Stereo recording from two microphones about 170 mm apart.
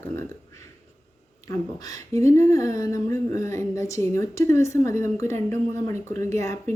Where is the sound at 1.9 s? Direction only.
20° left (ahead or behind).